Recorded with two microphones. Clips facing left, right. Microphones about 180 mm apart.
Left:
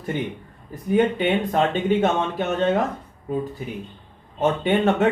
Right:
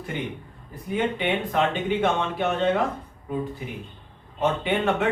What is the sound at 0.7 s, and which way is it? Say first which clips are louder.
Speech: left 6 dB; 40° left (ahead or behind).